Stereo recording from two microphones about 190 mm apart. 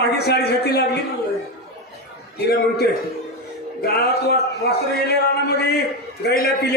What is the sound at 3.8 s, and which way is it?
A man's voice, 60° left (ahead or behind).